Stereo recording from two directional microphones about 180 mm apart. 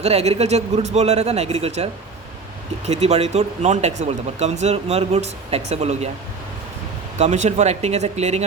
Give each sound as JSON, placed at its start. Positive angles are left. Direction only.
{"t": 0.0, "sound": "speech", "side_deg": -35}
{"t": 7.2, "sound": "speech", "side_deg": -40}